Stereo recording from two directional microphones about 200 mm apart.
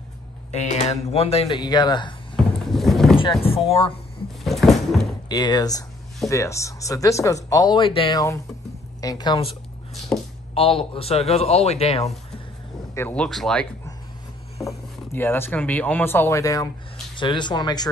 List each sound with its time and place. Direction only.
0.5 s speech: 35° left (ahead or behind)
2.3 s vehicle: centre (ahead or behind)
3.2 s speech: 25° left (ahead or behind)
4.5 s a sound: centre (ahead or behind)
5.3 s speech: 20° left (ahead or behind)
10.5 s a man's voice: 30° left (ahead or behind)
12.9 s speech: 10° left (ahead or behind)
15.1 s speech: 10° left (ahead or behind)